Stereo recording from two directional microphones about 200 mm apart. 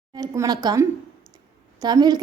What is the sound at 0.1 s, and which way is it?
A woman's voice, 20° right (ahead or behind).